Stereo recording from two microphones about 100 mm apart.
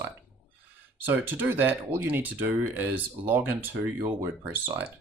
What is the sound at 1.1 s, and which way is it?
Speech, 20° right (ahead or behind).